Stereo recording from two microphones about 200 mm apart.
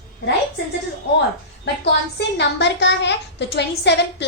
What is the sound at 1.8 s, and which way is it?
A woman's voice, 60° left (ahead or behind).